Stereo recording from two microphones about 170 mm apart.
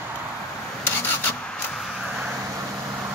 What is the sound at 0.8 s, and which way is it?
Rub, 10° left (ahead or behind).